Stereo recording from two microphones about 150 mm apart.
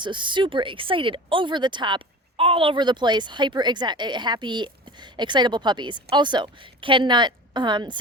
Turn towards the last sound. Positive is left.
turn(degrees=-30)  # may be behind; listen again after turning